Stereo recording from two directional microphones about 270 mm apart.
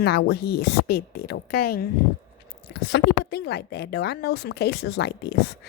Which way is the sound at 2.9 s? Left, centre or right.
Left.